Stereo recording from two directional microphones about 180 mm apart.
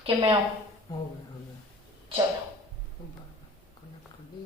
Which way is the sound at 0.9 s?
20° left (ahead or behind).